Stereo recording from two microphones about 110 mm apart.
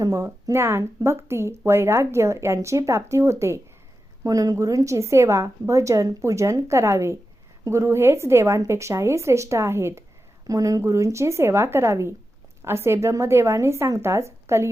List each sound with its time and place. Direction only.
0.0 s speech: 30° right (ahead or behind)